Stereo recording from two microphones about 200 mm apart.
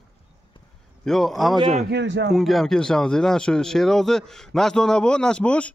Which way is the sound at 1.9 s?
60° right (ahead or behind).